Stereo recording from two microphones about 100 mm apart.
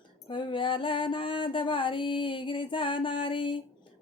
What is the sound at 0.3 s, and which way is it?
Music, 55° left (ahead or behind).